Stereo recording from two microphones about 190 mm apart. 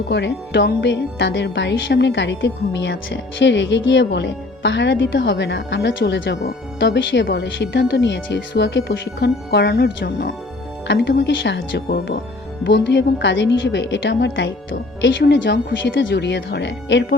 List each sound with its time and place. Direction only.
0.1 s speech: 65° left (ahead or behind)